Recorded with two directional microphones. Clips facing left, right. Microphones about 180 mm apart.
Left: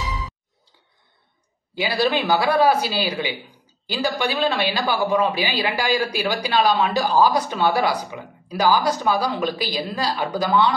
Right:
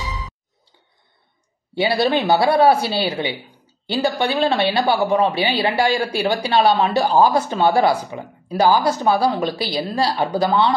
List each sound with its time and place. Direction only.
1.8 s speech: 25° right (ahead or behind)